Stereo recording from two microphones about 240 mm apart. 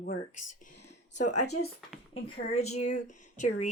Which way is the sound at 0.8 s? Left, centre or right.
Left.